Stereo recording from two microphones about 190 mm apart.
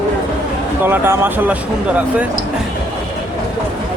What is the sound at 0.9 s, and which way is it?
Speech, 10° right (ahead or behind).